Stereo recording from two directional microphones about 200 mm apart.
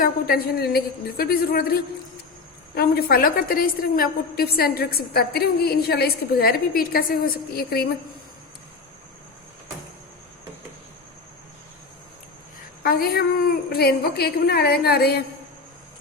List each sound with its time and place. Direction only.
0.0 s a woman's voice: 50° left (ahead or behind)
12.8 s a woman's voice: 50° left (ahead or behind)